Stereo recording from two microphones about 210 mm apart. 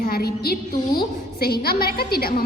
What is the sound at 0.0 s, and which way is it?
A woman's voice, 45° left (ahead or behind).